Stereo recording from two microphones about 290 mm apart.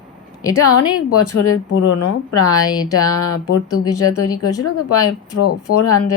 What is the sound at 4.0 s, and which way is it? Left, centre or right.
Speech, left.